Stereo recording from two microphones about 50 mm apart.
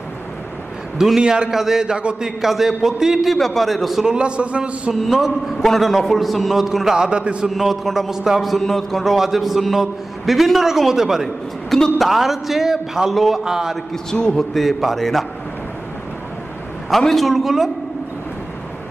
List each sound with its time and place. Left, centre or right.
0.9 s a man's voice: centre
2.2 s a man's voice: centre
3.3 s a man's voice: centre
4.0 s a man's voice: centre
5.1 s a man's voice: centre
7.4 s a man's voice: centre
13.4 s a man's voice: centre
14.1 s a man's voice: centre
14.5 s a man's voice: centre
17.0 s a man's voice: centre